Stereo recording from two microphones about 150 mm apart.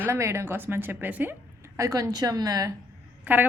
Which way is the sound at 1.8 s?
25° right (ahead or behind).